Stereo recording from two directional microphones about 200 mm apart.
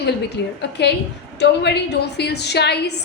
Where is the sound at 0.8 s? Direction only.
55° left (ahead or behind).